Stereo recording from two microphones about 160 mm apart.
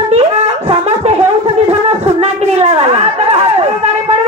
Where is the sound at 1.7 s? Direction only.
40° right (ahead or behind).